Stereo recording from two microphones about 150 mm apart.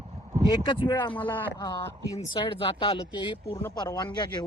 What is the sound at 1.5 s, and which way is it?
Speech, 25° left (ahead or behind).